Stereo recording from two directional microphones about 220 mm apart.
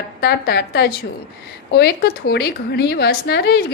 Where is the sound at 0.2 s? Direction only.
50° left (ahead or behind).